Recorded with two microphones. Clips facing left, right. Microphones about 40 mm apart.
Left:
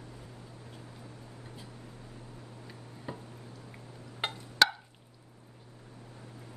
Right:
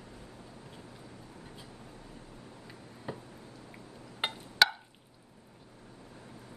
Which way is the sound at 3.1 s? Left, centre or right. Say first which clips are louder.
Right 1 dB; centre.